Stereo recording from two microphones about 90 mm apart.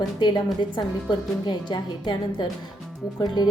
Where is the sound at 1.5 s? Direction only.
55° left (ahead or behind).